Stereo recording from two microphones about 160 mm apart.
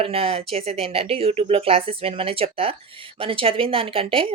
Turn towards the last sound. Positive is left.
turn(degrees=-35)  # may be behind; listen again after turning